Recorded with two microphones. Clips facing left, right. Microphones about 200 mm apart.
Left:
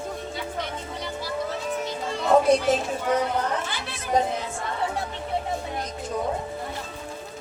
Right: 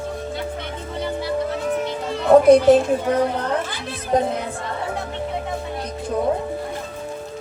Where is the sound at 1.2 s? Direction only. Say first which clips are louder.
Right 5 dB; 60° right (ahead or behind).